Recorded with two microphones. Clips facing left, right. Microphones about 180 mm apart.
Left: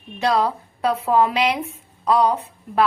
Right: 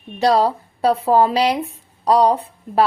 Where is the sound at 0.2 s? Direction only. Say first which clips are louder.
Right 4 dB; 35° right (ahead or behind).